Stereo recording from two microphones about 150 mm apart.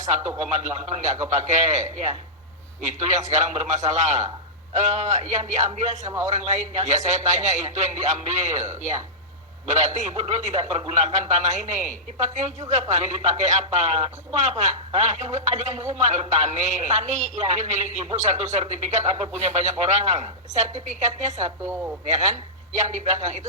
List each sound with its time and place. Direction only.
0.0 s a man's voice: 50° right (ahead or behind)
6.1 s a man's voice: 20° right (ahead or behind)
6.3 s a man's voice: 50° right (ahead or behind)
21.6 s speech: 15° right (ahead or behind)
22.0 s a man's voice: 50° right (ahead or behind)